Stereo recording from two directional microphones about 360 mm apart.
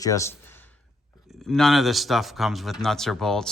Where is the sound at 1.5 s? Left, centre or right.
Centre.